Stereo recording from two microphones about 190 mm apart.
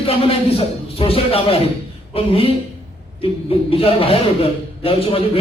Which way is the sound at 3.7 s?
30° left (ahead or behind).